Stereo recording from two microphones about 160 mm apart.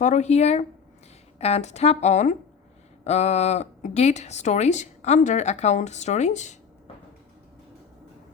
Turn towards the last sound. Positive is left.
turn(degrees=50)  # may be behind; listen again after turning